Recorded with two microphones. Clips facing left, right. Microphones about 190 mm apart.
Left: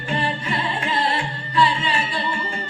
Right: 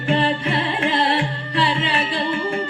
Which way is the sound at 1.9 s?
55° right (ahead or behind).